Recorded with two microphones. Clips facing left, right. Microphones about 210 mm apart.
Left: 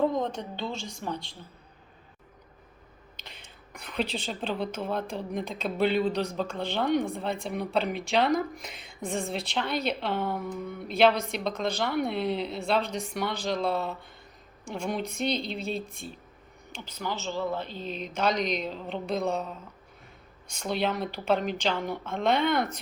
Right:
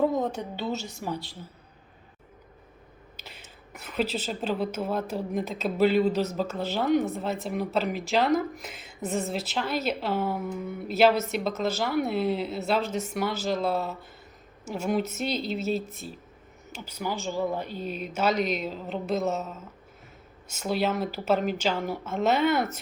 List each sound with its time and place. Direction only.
0.0 s speech: 5° right (ahead or behind)
3.2 s speech: 5° right (ahead or behind)